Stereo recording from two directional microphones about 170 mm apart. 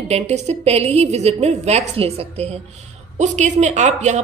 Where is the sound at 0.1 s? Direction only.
40° right (ahead or behind).